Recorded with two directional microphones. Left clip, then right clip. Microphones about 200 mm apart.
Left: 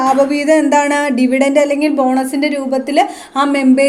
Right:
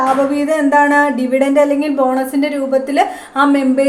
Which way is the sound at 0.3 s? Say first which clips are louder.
Left 1 dB; 45° left (ahead or behind).